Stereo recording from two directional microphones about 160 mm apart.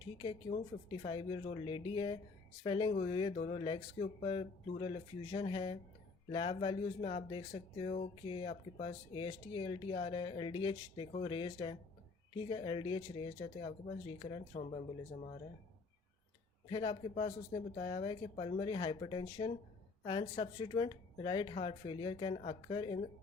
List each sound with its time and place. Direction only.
0.5 s speech: 55° left (ahead or behind)
0.9 s speech: 30° left (ahead or behind)
16.6 s speech: 30° left (ahead or behind)